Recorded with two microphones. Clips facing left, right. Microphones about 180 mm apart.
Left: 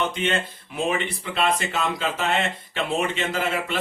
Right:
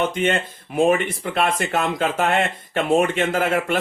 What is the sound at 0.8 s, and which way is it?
Speech, 50° right (ahead or behind).